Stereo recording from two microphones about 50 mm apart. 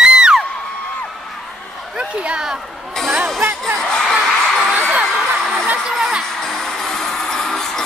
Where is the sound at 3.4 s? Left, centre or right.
Right.